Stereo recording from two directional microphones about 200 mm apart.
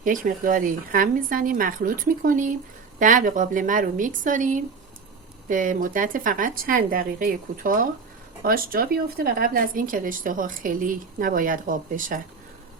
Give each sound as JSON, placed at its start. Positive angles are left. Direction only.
{"t": 0.0, "sound": "a woman's voice", "side_deg": -40}